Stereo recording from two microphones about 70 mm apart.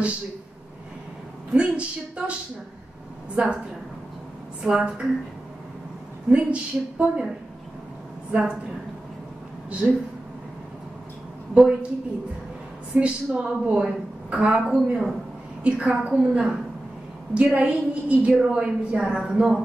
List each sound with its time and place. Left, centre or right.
1.5 s a woman's voice: centre
3.4 s a woman's voice: centre
4.6 s a woman's voice: centre
6.3 s a woman's voice: centre
8.3 s a woman's voice: centre
9.8 s a woman's voice: centre
11.5 s a woman's voice: centre
12.9 s a woman's voice: centre
14.7 s speech: centre
15.6 s a woman's voice: centre